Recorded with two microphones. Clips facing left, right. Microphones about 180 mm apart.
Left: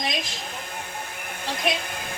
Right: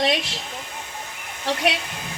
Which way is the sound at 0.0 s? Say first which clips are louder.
Right 7 dB; 70° right (ahead or behind).